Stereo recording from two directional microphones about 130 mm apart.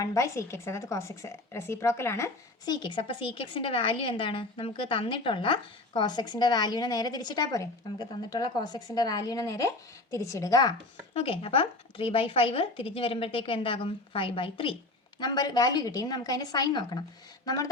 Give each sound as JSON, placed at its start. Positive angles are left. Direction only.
{"t": 0.0, "sound": "a woman's voice", "side_deg": 25}
{"t": 2.8, "sound": "a woman's voice", "side_deg": 40}
{"t": 11.1, "sound": "speech", "side_deg": 45}
{"t": 15.2, "sound": "a woman's voice", "side_deg": 30}